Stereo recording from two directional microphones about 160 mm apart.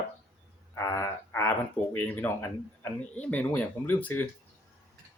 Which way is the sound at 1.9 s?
10° left (ahead or behind).